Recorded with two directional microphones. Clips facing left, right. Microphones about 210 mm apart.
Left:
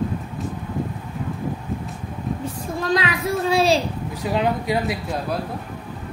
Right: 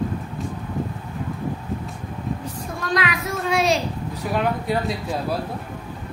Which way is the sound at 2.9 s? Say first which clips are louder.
Left 2 dB; 30° left (ahead or behind).